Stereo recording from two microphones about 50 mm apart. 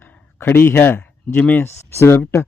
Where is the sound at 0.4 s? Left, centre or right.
Left.